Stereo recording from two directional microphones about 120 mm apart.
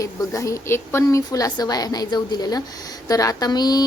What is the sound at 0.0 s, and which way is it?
A woman's voice, 25° left (ahead or behind).